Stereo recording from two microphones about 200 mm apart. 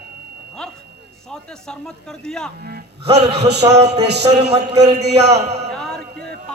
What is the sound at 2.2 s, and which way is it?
Speech, 5° left (ahead or behind).